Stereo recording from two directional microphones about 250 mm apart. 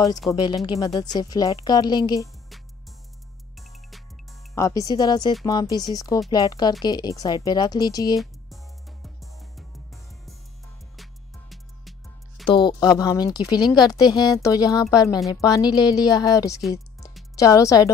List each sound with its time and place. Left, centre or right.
0.3 s speech: centre
3.5 s music: centre
4.6 s speech: centre
9.0 s music: centre
12.4 s speech: centre